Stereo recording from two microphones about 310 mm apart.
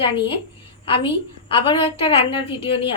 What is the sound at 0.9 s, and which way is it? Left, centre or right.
Speech, centre.